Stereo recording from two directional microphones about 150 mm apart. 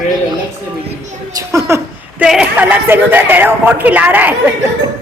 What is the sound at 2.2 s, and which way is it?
Speech, 5° right (ahead or behind).